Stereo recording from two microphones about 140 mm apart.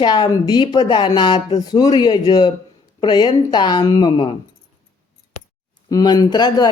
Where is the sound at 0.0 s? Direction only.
30° left (ahead or behind).